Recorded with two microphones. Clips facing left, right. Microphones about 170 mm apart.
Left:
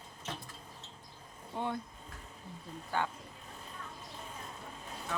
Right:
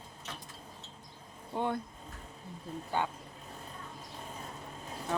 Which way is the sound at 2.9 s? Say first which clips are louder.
Right 1 dB; 20° right (ahead or behind).